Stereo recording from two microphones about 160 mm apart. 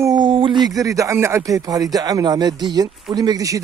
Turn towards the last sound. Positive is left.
turn(degrees=-20)  # may be behind; listen again after turning